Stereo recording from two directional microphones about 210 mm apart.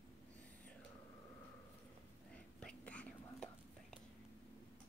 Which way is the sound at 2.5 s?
5° left (ahead or behind).